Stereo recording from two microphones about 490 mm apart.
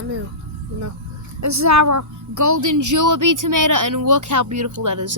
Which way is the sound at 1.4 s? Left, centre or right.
Right.